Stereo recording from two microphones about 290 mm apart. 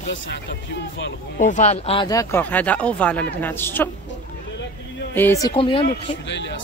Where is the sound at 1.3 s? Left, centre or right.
Left; by 3.8 s centre.